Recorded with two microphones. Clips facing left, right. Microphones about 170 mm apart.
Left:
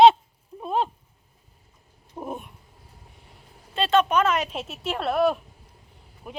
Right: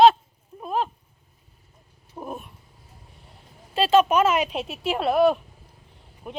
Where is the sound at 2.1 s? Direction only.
15° left (ahead or behind).